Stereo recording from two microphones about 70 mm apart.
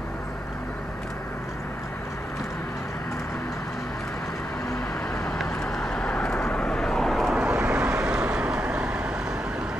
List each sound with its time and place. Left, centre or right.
5.4 s vehicle: centre
7.3 s vehicle: centre